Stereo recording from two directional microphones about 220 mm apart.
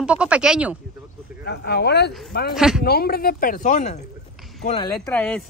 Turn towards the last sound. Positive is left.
turn(degrees=5)  # may be behind; listen again after turning